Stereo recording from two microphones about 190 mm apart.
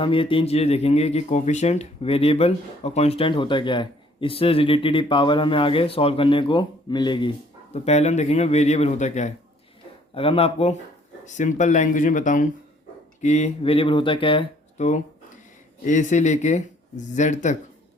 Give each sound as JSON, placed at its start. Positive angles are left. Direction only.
{"t": 0.0, "sound": "speech", "side_deg": 25}
{"t": 15.9, "sound": "speech", "side_deg": 40}